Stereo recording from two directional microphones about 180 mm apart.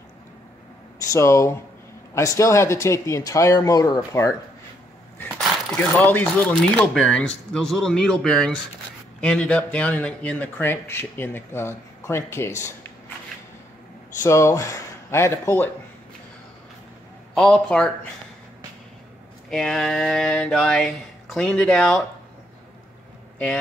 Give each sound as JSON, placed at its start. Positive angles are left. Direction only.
{"t": 1.1, "sound": "speech", "side_deg": 15}
{"t": 5.2, "sound": "speech", "side_deg": 5}
{"t": 14.2, "sound": "speech", "side_deg": 15}
{"t": 17.4, "sound": "speech", "side_deg": 5}
{"t": 19.5, "sound": "speech", "side_deg": 5}